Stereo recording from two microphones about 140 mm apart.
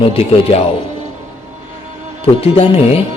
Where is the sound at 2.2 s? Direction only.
45° left (ahead or behind).